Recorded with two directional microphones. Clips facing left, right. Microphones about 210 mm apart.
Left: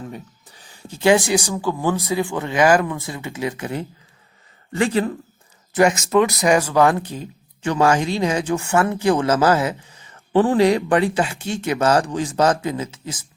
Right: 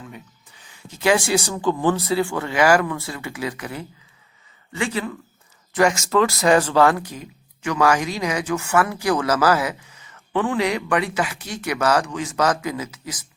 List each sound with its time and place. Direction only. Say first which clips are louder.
0.1 s speech: left 5 dB; 35° left (ahead or behind)
4.7 s speech: left 6 dB; 40° left (ahead or behind)
5.7 s speech: left 2 dB; 25° left (ahead or behind)